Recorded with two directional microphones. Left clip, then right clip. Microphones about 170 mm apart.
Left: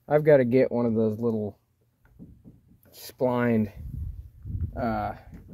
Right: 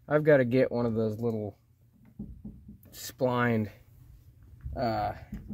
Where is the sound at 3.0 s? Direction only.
20° left (ahead or behind).